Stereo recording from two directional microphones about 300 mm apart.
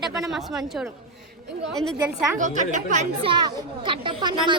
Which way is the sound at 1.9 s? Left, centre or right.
Centre.